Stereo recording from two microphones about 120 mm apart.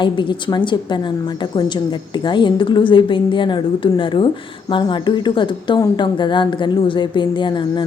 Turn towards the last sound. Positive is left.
turn(degrees=40)  # may be behind; listen again after turning